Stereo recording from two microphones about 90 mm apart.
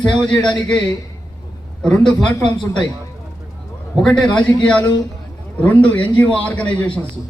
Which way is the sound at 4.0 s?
5° left (ahead or behind).